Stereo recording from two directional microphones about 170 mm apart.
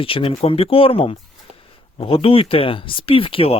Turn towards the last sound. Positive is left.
turn(degrees=30)  # may be behind; listen again after turning